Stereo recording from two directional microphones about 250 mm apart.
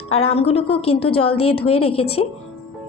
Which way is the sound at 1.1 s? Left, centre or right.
Left.